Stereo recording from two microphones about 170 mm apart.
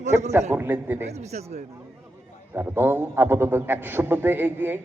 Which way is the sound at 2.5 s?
10° right (ahead or behind).